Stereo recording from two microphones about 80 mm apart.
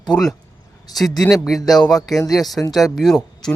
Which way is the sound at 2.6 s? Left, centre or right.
Centre.